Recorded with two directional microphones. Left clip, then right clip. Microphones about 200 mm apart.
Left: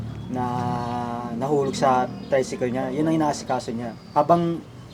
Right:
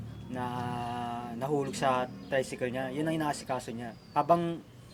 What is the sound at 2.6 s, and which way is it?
Speech, 45° right (ahead or behind).